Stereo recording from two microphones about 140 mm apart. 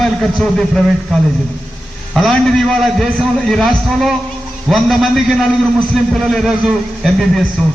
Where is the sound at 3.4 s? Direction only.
Centre (ahead or behind).